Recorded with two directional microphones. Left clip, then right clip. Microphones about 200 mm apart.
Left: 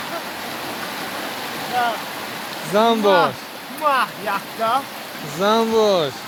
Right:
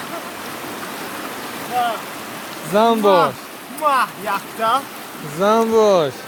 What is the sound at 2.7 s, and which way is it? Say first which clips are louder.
Speech: right 2 dB; 15° right (ahead or behind).